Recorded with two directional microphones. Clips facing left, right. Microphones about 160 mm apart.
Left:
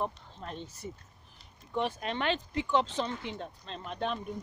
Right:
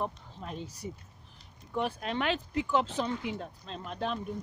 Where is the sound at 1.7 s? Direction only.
Centre (ahead or behind).